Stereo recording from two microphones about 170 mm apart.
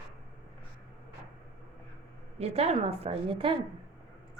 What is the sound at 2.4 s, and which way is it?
A woman's voice, 40° right (ahead or behind).